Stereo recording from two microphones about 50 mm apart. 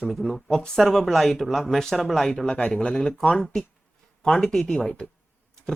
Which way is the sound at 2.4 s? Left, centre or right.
Left.